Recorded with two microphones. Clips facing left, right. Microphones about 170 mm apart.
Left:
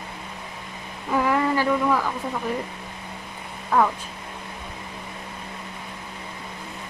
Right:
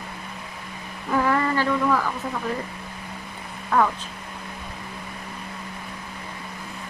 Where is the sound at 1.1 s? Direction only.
10° left (ahead or behind).